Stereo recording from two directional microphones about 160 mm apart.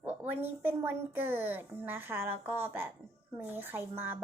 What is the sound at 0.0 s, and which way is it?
A woman's voice, 10° right (ahead or behind).